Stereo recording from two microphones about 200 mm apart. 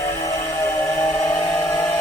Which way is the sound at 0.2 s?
15° left (ahead or behind).